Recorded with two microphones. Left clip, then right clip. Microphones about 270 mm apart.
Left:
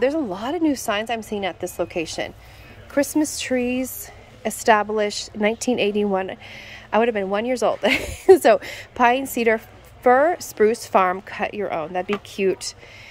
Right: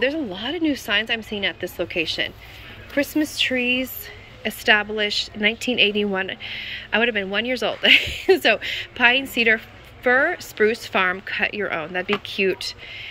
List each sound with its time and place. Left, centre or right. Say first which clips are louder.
0.0 s a woman's voice: left 2 dB; centre